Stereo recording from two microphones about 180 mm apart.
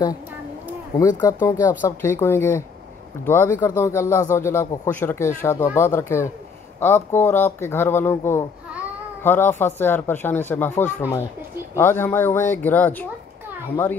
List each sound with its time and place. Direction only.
0.9 s speech: 20° left (ahead or behind)